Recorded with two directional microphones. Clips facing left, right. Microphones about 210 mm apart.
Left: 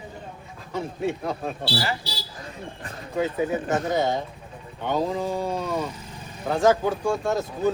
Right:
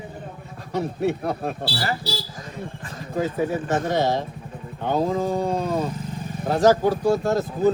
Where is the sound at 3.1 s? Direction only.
35° right (ahead or behind).